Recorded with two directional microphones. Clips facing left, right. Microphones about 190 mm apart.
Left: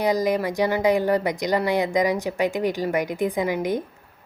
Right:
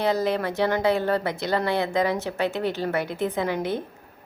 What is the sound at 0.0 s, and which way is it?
A woman's voice, 15° left (ahead or behind).